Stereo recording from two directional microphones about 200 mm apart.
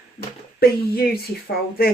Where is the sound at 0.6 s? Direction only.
50° left (ahead or behind).